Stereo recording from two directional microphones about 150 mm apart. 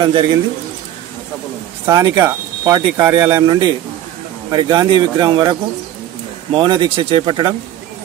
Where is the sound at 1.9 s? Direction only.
20° right (ahead or behind).